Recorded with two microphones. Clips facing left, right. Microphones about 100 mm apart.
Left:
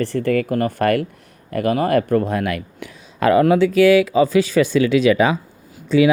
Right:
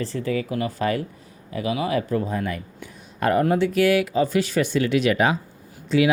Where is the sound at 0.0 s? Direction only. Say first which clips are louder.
Left 7 dB; 60° left (ahead or behind); by 3.6 s 90° left.